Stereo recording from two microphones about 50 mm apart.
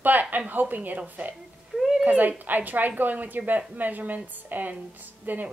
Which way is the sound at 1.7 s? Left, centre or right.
Centre.